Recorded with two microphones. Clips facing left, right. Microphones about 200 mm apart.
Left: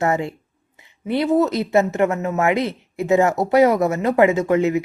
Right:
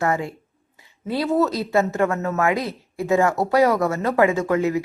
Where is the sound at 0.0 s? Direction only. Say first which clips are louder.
Left 2 dB; 25° left (ahead or behind).